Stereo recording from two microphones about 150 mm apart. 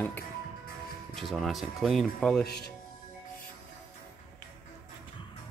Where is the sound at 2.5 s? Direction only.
90° left.